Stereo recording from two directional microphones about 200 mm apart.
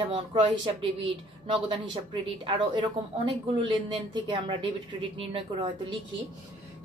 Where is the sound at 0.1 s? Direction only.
25° right (ahead or behind).